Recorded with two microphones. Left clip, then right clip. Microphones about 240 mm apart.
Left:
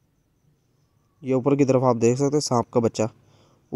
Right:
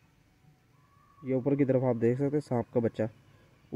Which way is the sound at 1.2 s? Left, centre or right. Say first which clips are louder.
Left 8 dB; left.